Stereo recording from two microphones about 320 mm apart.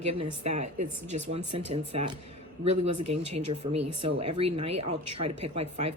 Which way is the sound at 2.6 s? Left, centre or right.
Right.